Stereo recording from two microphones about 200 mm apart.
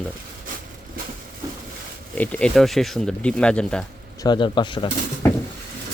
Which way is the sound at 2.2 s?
5° left (ahead or behind).